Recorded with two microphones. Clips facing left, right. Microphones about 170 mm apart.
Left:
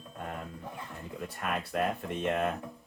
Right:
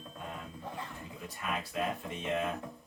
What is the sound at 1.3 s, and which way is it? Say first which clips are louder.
Speech: left 3 dB; 55° left (ahead or behind).